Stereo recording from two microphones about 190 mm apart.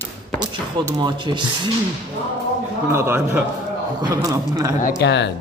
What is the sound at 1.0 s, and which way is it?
Speech, 25° right (ahead or behind).